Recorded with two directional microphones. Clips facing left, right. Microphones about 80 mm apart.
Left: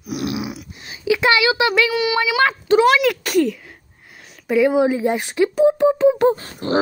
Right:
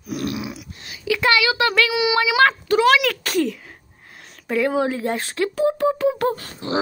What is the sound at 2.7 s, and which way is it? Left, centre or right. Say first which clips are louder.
Speech: left 4 dB; left.